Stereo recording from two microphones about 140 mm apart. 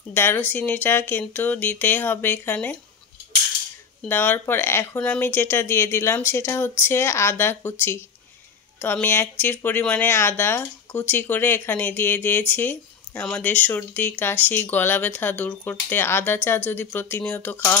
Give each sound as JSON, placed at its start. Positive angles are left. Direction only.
{"t": 0.1, "sound": "speech", "side_deg": 15}
{"t": 4.1, "sound": "speech", "side_deg": 15}
{"t": 8.8, "sound": "speech", "side_deg": 15}